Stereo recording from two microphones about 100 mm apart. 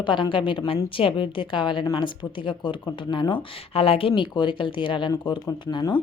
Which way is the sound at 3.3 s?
70° left (ahead or behind).